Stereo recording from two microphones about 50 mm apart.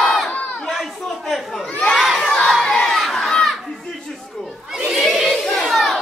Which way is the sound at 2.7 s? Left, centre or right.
Centre.